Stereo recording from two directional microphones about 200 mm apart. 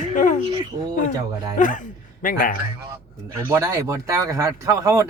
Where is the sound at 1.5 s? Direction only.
40° left (ahead or behind).